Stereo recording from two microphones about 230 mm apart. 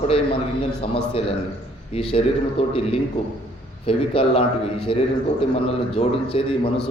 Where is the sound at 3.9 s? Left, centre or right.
Left.